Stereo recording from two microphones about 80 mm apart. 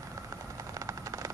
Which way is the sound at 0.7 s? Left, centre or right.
Right.